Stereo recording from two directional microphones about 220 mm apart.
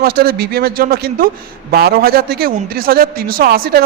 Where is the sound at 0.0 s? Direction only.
45° right (ahead or behind).